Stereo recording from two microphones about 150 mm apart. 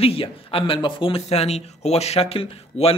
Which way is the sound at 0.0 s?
40° left (ahead or behind).